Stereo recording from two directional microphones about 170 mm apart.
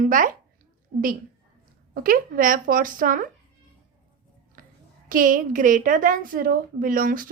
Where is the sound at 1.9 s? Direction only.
55° right (ahead or behind).